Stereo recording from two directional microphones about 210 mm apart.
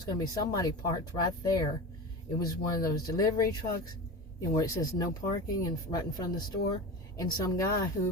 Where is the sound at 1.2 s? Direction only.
20° left (ahead or behind).